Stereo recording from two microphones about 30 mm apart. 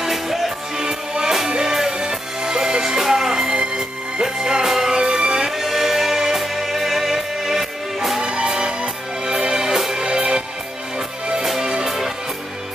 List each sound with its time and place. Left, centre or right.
0.0 s music: centre
0.7 s music: right
1.5 s music: centre
4.6 s music: centre
5.0 s music: centre
8.2 s music: right; by 10.4 s centre
11.8 s music: centre